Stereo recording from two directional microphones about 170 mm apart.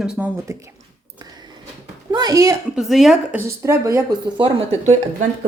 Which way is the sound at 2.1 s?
25° right (ahead or behind).